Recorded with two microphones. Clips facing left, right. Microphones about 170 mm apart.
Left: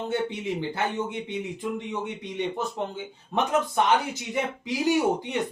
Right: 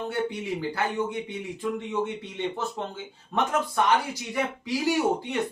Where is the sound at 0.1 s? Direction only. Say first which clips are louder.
Left 1 dB; 20° left (ahead or behind).